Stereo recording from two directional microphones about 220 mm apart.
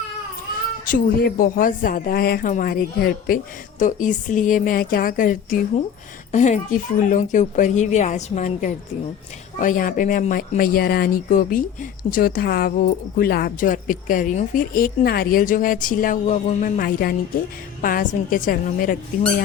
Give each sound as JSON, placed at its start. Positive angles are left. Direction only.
{"t": 0.9, "sound": "speech", "side_deg": 40}